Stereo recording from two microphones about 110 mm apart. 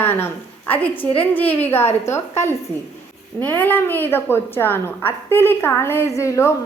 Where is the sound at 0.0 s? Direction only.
20° left (ahead or behind).